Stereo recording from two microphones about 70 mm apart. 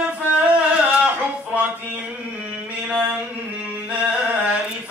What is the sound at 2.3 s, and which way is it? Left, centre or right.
Music, centre.